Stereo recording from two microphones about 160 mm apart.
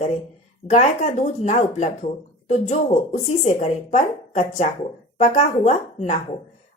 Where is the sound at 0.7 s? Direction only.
45° left (ahead or behind).